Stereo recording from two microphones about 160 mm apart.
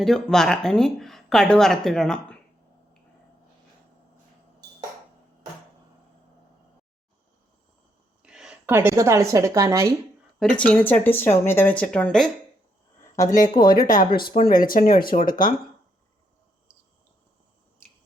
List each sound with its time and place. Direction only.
0.0 s speech: 5° left (ahead or behind)
8.2 s a sound: 5° right (ahead or behind)
8.7 s a woman's voice: 15° right (ahead or behind)
10.4 s speech: 5° left (ahead or behind)
13.0 s a sound: 20° left (ahead or behind)
13.4 s speech: 65° left (ahead or behind)